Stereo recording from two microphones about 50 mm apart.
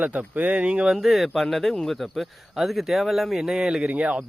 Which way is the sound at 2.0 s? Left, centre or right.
Centre.